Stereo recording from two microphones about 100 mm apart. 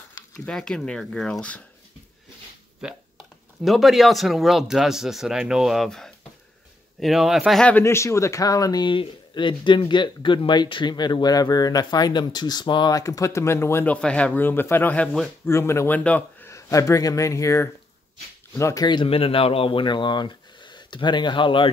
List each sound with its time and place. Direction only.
0.5 s speech: 5° left (ahead or behind)
3.6 s speech: centre (ahead or behind)
7.8 s speech: 30° left (ahead or behind)
8.9 s speech: 55° left (ahead or behind)
12.9 s speech: 35° left (ahead or behind)
14.0 s speech: 10° left (ahead or behind)
16.0 s speech: 15° left (ahead or behind)
16.4 s speech: 30° left (ahead or behind)
19.0 s speech: 70° left (ahead or behind)